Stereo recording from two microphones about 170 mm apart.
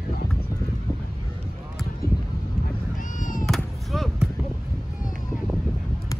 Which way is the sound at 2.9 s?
50° left (ahead or behind).